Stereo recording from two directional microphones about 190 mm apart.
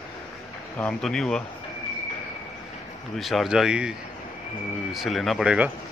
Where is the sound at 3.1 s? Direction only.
Centre (ahead or behind).